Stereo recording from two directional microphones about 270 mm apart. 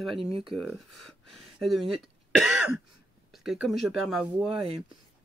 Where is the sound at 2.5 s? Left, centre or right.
Centre.